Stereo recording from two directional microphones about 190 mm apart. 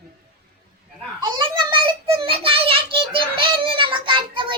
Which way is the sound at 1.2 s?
25° right (ahead or behind).